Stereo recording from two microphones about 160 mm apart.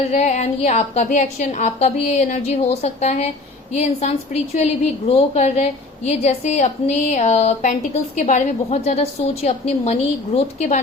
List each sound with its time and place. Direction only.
0.0 s a woman's voice: 45° left (ahead or behind)